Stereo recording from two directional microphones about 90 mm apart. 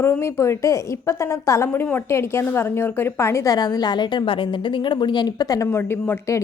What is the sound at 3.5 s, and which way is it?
A woman's voice, 45° left (ahead or behind).